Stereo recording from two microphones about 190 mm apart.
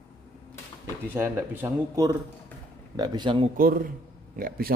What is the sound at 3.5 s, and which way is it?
Speech, 50° right (ahead or behind).